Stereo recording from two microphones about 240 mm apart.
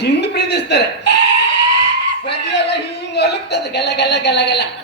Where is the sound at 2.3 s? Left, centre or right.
Left.